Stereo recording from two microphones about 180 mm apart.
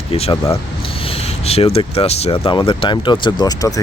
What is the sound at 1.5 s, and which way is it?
Speech, 35° left (ahead or behind).